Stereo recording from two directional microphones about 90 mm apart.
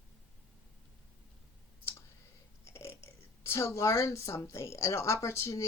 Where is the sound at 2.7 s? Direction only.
30° left (ahead or behind).